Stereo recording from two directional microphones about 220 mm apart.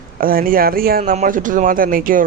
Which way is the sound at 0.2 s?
40° right (ahead or behind).